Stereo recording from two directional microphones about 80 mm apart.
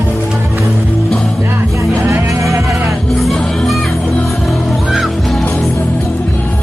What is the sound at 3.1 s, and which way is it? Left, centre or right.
Music, centre.